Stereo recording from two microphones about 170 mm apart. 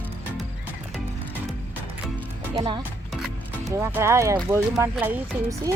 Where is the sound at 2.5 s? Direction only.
30° right (ahead or behind).